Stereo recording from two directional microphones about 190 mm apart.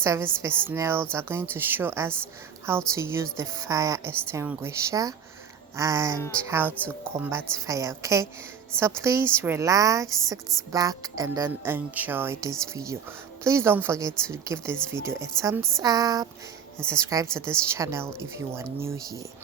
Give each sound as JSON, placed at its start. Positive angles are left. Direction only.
{"t": 0.0, "sound": "a woman's voice", "side_deg": -15}
{"t": 6.1, "sound": "speech", "side_deg": 15}
{"t": 6.5, "sound": "a woman's voice", "side_deg": -10}